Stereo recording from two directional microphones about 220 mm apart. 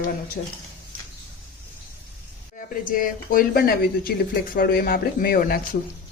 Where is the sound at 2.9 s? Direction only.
40° left (ahead or behind).